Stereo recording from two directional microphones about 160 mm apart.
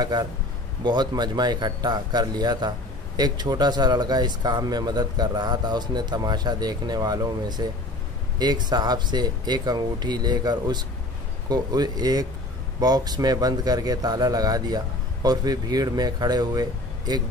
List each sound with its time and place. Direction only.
0.0 s speech: 25° right (ahead or behind)